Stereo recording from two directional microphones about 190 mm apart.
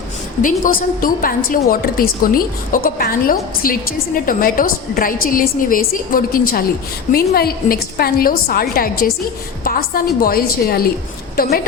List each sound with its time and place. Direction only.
0.4 s a woman's voice: 45° left (ahead or behind)